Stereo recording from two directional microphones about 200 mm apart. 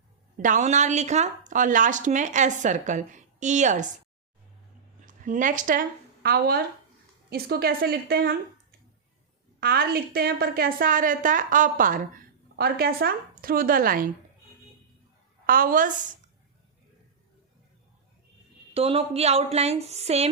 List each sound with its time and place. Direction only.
0.3 s speech: 40° right (ahead or behind)
5.0 s a woman's voice: 40° right (ahead or behind)
9.6 s a woman's voice: 50° right (ahead or behind)
15.4 s a woman's voice: 45° right (ahead or behind)
18.7 s speech: 30° right (ahead or behind)